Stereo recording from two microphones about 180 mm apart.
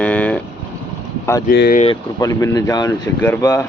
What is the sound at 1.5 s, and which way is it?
Speech, 60° left (ahead or behind).